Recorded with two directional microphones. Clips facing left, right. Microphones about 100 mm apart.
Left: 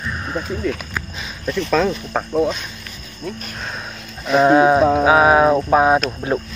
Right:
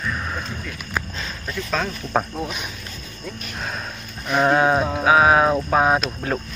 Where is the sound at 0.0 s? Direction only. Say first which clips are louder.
Left 2 dB; 10° left (ahead or behind).